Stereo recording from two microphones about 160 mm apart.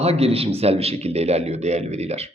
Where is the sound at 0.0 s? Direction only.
40° right (ahead or behind).